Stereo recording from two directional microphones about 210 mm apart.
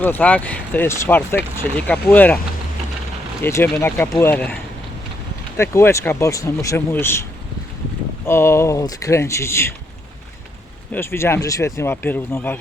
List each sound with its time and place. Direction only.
0.0 s speech: 5° left (ahead or behind)
3.4 s speech: 10° left (ahead or behind)
5.5 s speech: 15° left (ahead or behind)
8.3 s speech: 10° left (ahead or behind)
10.9 s speech: 10° left (ahead or behind)